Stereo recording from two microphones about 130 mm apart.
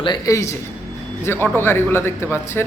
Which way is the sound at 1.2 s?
20° left (ahead or behind).